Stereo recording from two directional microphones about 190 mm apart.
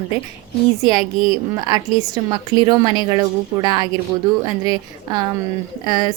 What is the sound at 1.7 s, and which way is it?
A woman's voice, 20° right (ahead or behind).